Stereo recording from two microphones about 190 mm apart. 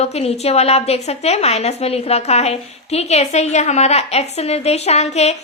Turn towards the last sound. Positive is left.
turn(degrees=35)  # may be behind; listen again after turning